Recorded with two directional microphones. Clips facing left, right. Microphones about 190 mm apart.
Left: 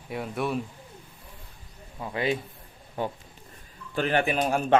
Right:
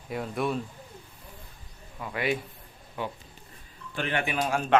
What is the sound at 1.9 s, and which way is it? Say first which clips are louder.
Speech: left 2 dB; 25° left (ahead or behind).